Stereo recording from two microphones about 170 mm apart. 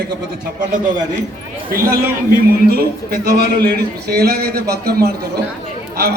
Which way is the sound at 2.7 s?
60° right (ahead or behind).